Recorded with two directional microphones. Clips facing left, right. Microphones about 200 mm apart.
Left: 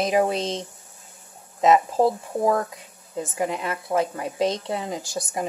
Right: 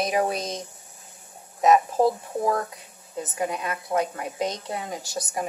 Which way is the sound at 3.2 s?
25° left (ahead or behind).